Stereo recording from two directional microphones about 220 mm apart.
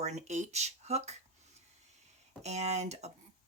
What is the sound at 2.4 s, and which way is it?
Speech, 30° right (ahead or behind).